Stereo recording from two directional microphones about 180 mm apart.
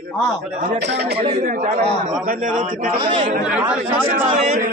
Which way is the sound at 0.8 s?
65° right (ahead or behind).